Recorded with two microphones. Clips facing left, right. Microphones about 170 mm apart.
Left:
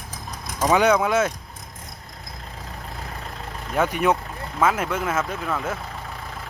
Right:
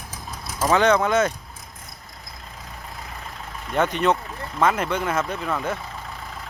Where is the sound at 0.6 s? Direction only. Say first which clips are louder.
Even; 15° left (ahead or behind).